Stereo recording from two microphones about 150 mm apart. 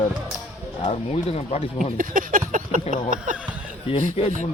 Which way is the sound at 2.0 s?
65° right (ahead or behind).